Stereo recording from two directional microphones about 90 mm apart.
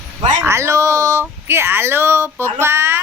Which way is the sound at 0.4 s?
30° right (ahead or behind).